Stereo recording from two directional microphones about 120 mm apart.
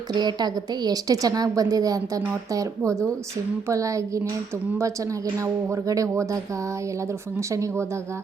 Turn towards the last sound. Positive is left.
turn(degrees=-25)  # may be behind; listen again after turning